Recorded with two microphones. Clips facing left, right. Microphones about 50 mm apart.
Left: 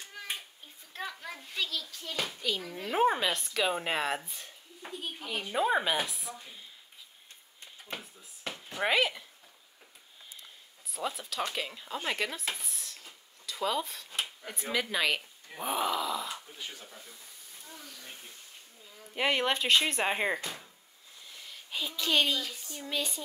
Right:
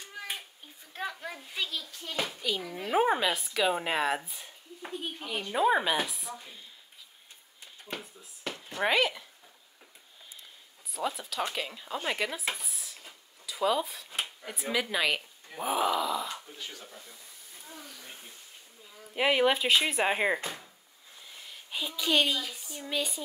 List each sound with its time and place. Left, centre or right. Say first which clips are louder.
0.9 s a sound: right 3 dB; centre
2.0 s speech: right 4 dB; centre
7.8 s a sound: right 2 dB; centre
8.6 s speech: right 1 dB; centre
10.9 s speech: right 2 dB; centre
12.5 s drawer open or close: right 1 dB; centre
14.2 s speech: right 3 dB; centre
16.5 s speech: even; centre
16.8 s speech: right 1 dB; centre
17.6 s speech: right 2 dB; centre
19.1 s speech: right 4 dB; centre
21.4 s speech: right 1 dB; centre